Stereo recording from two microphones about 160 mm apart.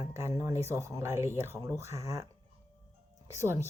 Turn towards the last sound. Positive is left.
turn(degrees=-15)  # may be behind; listen again after turning